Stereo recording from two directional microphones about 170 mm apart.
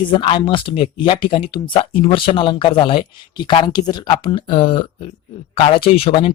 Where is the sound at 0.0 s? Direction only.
30° left (ahead or behind).